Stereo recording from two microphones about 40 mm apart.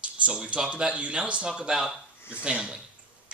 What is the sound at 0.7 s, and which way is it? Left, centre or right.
Speech, right.